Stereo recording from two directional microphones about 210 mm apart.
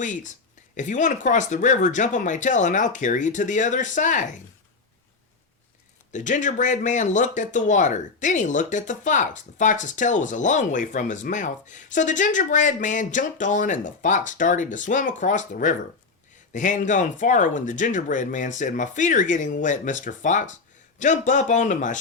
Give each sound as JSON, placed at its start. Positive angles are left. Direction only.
{"t": 0.0, "sound": "speech", "side_deg": 35}
{"t": 6.1, "sound": "speech", "side_deg": 35}